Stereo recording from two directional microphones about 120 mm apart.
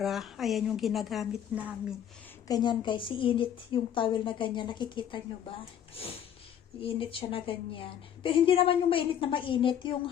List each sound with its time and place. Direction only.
0.0 s speech: centre (ahead or behind)
2.5 s a woman's voice: 35° left (ahead or behind)
6.8 s a woman's voice: 50° left (ahead or behind)